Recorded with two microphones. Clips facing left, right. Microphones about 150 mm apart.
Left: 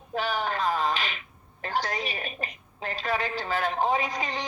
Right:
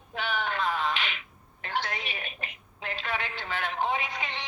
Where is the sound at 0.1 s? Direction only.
40° left (ahead or behind).